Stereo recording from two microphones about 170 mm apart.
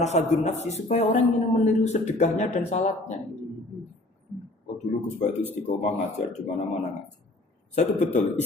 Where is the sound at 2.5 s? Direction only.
45° left (ahead or behind).